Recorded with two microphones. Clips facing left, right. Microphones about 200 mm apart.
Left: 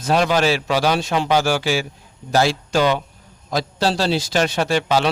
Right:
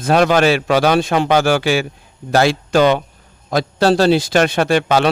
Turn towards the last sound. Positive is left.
turn(degrees=-60)  # may be behind; listen again after turning